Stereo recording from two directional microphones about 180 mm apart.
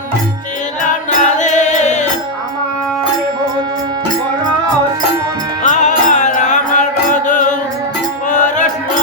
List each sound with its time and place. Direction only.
0.8 s music: 45° left (ahead or behind)
5.6 s music: 40° left (ahead or behind)